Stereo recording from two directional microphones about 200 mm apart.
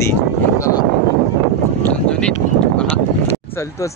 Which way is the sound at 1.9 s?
5° left (ahead or behind).